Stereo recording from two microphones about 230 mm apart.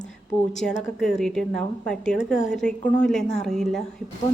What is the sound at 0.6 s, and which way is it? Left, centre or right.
A woman's voice, centre.